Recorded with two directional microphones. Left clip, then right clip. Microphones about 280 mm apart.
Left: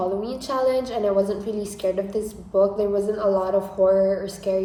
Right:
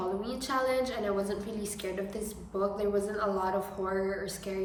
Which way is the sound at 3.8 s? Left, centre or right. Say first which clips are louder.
Left 18 dB; left.